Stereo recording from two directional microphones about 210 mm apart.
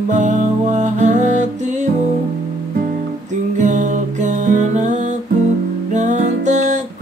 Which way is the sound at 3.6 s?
35° right (ahead or behind).